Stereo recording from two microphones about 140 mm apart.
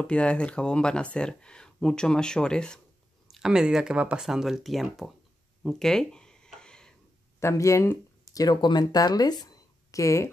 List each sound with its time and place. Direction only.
0.0 s speech: 10° left (ahead or behind)
5.6 s a sound: 5° left (ahead or behind)
7.3 s speech: 20° left (ahead or behind)